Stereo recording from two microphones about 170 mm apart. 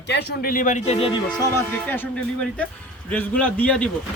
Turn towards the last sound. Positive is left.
turn(degrees=10)  # may be behind; listen again after turning